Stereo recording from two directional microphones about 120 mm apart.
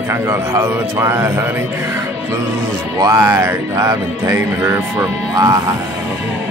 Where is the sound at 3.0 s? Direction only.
30° right (ahead or behind).